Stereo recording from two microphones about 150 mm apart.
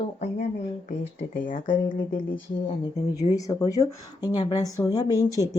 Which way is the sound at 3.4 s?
25° left (ahead or behind).